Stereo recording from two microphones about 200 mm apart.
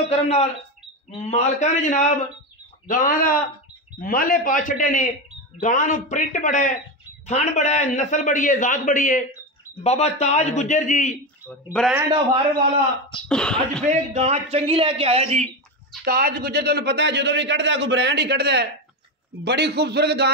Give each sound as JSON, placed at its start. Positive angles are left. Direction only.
{"t": 0.1, "sound": "a man's voice", "side_deg": 30}
{"t": 11.4, "sound": "speech", "side_deg": 5}
{"t": 13.3, "sound": "speech", "side_deg": 5}
{"t": 13.8, "sound": "a man's voice", "side_deg": -35}
{"t": 16.0, "sound": "a man's voice", "side_deg": -50}